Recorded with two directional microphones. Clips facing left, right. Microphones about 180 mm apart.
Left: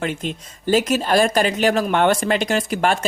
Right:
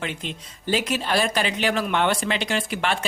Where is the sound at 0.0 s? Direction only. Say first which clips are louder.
Left 6 dB; 45° left (ahead or behind).